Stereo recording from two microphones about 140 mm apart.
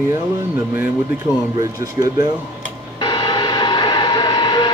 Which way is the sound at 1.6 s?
25° right (ahead or behind).